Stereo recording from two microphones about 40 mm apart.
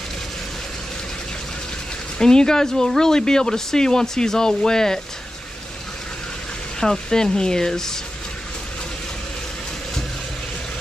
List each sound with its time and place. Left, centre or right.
2.1 s speech: centre
6.8 s speech: centre